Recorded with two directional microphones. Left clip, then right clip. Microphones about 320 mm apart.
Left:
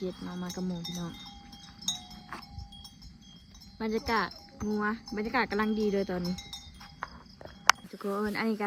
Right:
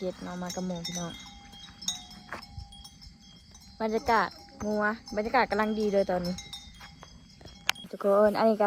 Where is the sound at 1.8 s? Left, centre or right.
Left.